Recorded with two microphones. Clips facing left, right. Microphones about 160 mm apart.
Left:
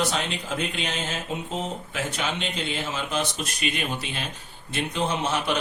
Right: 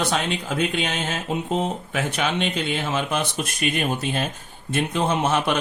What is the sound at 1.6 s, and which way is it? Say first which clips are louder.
Speech: right 5 dB; 60° right (ahead or behind).